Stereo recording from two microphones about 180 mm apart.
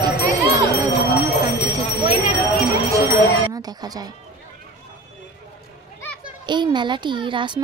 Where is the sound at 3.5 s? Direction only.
20° right (ahead or behind).